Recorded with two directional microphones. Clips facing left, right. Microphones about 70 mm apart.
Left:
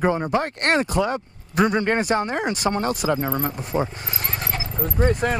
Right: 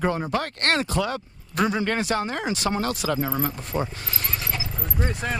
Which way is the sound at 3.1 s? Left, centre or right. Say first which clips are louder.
Left 1 dB; centre.